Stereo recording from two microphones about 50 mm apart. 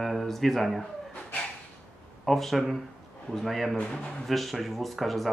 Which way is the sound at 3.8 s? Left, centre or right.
Centre.